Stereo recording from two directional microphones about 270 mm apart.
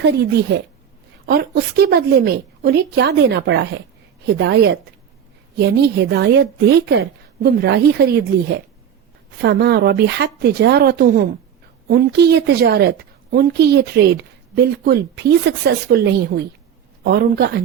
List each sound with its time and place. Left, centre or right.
0.0 s a woman's voice: right